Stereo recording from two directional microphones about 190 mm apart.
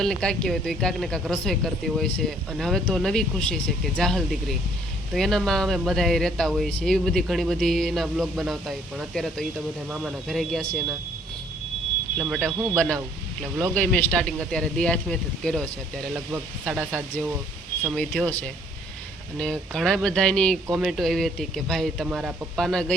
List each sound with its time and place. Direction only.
0.0 s speech: 5° left (ahead or behind)
12.1 s speech: centre (ahead or behind)
17.9 s speech: 5° left (ahead or behind)